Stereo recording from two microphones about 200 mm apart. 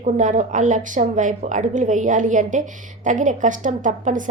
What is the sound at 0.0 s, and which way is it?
A woman's voice, 40° right (ahead or behind).